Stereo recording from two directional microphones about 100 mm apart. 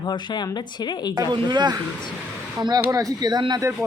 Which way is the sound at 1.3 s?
50° right (ahead or behind).